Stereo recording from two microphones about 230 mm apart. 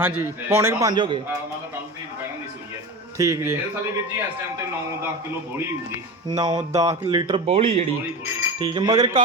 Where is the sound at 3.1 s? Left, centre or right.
Centre.